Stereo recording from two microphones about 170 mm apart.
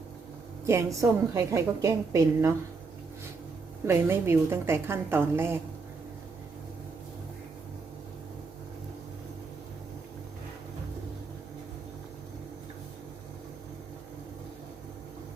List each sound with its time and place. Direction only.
0.6 s a woman's voice: 15° right (ahead or behind)
3.8 s a woman's voice: 15° right (ahead or behind)